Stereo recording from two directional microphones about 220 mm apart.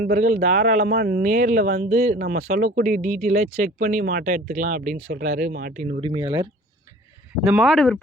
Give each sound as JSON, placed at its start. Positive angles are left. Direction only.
{"t": 0.0, "sound": "speech", "side_deg": -40}
{"t": 6.0, "sound": "speech", "side_deg": -20}
{"t": 7.4, "sound": "speech", "side_deg": -5}